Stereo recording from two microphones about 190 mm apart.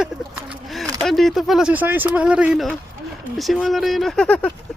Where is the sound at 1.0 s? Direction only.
Centre (ahead or behind).